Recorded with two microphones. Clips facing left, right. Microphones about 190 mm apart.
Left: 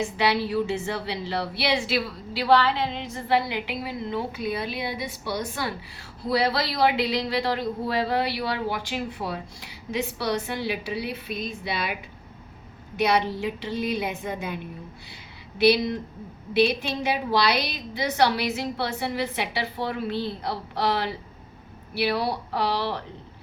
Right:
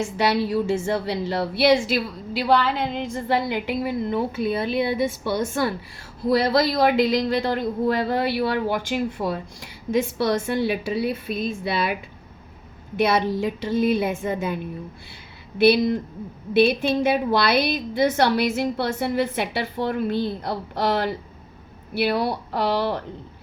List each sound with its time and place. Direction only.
0.0 s a woman's voice: 45° right (ahead or behind)
13.0 s a woman's voice: 45° right (ahead or behind)
15.5 s a woman's voice: 50° right (ahead or behind)